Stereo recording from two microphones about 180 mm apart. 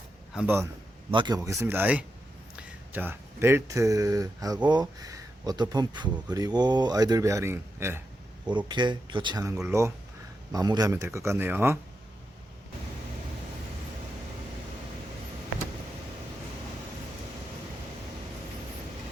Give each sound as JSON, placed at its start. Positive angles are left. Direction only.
{"t": 0.3, "sound": "speech", "side_deg": -15}
{"t": 1.1, "sound": "speech", "side_deg": -25}
{"t": 8.4, "sound": "speech", "side_deg": -25}